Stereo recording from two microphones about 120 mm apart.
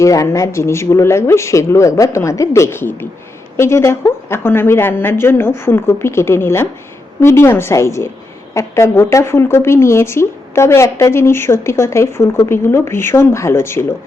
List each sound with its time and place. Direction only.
0.0 s speech: 25° left (ahead or behind)